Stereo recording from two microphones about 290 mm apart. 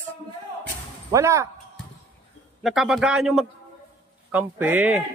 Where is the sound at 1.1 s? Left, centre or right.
Centre.